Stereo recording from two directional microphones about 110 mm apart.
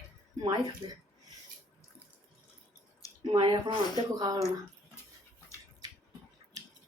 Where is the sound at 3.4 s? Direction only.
45° right (ahead or behind).